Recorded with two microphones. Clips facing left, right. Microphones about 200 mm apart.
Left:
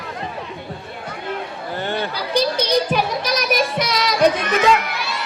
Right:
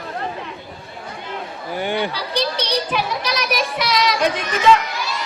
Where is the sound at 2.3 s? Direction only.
45° left (ahead or behind).